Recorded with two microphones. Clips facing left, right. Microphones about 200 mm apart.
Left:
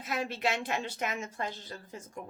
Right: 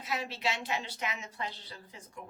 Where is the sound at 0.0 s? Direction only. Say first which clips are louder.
Left 3 dB; 50° left (ahead or behind).